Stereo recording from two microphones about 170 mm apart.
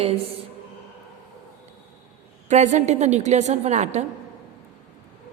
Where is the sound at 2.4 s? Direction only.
45° right (ahead or behind).